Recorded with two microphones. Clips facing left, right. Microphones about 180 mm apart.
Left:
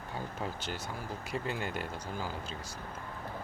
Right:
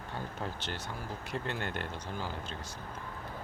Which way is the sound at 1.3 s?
5° left (ahead or behind).